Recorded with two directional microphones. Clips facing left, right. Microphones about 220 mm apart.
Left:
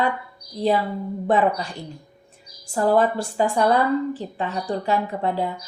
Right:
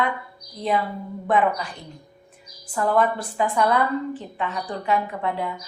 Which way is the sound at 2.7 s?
30° left (ahead or behind).